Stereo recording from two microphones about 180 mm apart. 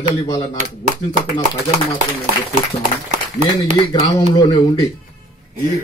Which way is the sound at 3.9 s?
25° left (ahead or behind).